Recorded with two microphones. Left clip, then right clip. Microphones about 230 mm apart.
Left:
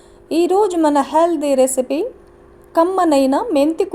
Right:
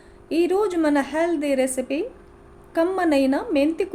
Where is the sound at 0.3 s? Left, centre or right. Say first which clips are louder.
Left 6 dB; left.